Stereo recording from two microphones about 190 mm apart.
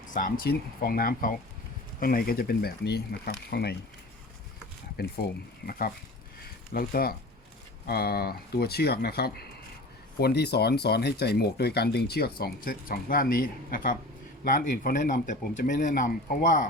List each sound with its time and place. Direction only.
0.1 s speech: 45° left (ahead or behind)
5.0 s speech: 55° left (ahead or behind)
6.4 s a sound: 50° left (ahead or behind)
7.9 s speech: 55° left (ahead or behind)